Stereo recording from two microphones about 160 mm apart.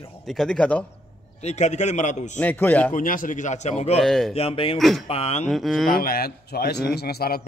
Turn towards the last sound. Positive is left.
turn(degrees=75)  # may be behind; listen again after turning